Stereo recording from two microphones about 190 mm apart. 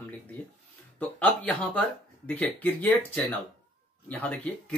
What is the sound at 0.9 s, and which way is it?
Speech, 5° left (ahead or behind).